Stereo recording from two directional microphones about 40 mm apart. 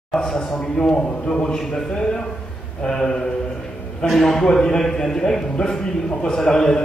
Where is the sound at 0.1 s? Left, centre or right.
Centre.